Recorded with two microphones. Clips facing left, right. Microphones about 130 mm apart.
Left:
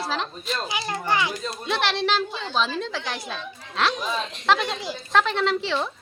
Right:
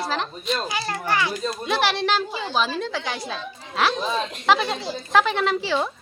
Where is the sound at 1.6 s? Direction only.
Centre (ahead or behind).